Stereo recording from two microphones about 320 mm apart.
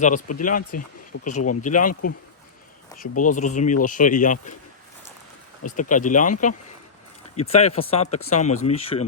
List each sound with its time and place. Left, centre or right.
0.0 s speech: left
3.0 s speech: left
5.9 s speech: left